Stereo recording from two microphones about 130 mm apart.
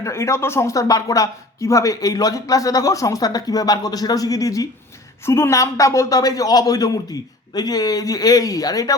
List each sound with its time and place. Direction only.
0.0 s speech: 20° left (ahead or behind)